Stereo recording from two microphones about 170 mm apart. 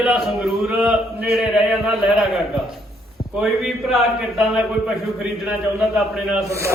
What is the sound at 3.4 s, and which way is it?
Speech, centre (ahead or behind).